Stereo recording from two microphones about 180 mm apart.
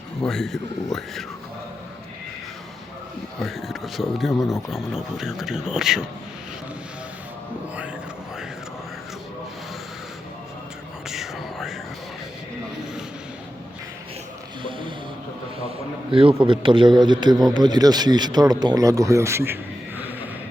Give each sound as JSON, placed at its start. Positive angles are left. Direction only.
{"t": 0.2, "sound": "speech", "side_deg": 5}
{"t": 3.4, "sound": "speech", "side_deg": 0}
{"t": 11.1, "sound": "whispering", "side_deg": 0}
{"t": 14.6, "sound": "a sound", "side_deg": -30}
{"t": 16.1, "sound": "speech", "side_deg": -30}